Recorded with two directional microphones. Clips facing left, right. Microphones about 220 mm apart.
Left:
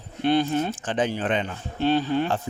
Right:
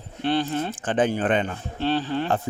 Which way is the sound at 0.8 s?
55° right (ahead or behind).